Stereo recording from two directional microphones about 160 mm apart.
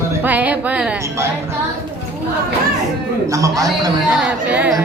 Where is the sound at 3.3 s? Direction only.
20° right (ahead or behind).